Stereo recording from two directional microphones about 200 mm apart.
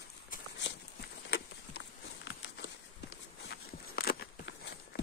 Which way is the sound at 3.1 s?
55° left (ahead or behind).